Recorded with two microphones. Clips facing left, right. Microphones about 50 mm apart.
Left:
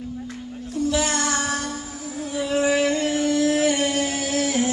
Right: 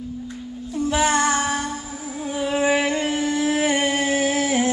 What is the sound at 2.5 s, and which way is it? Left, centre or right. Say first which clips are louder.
Music: even; centre.